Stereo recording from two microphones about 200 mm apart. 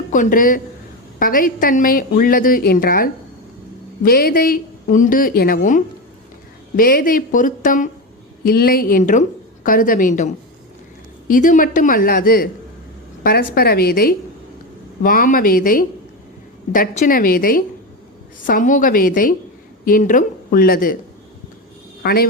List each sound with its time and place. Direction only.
0.1 s a woman's voice: 40° left (ahead or behind)
22.0 s speech: 50° left (ahead or behind)